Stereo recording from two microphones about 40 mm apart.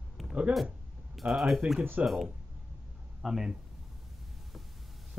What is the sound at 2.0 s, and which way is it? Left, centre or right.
Speech, right.